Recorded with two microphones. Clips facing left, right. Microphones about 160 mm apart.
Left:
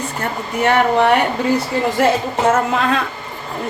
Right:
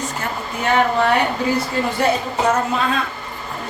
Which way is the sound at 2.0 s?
90° left.